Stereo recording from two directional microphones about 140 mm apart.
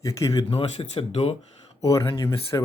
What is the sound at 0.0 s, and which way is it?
Speech, 25° left (ahead or behind).